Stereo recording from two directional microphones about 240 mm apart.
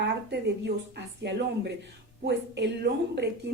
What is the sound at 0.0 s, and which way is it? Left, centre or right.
Speech, right.